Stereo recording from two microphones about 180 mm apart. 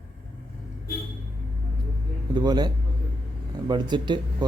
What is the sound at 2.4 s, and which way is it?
Speech, 25° right (ahead or behind).